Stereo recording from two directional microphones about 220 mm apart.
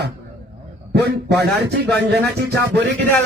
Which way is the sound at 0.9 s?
50° right (ahead or behind).